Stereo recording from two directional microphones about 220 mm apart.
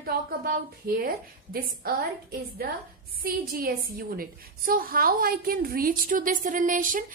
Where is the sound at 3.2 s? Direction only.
40° right (ahead or behind).